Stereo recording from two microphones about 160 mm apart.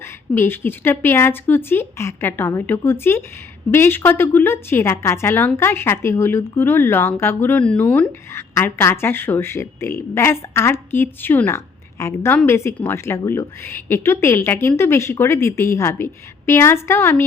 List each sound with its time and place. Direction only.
0.0 s a woman's voice: 15° left (ahead or behind)